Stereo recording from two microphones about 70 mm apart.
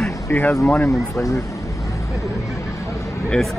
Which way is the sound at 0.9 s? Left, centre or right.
Left.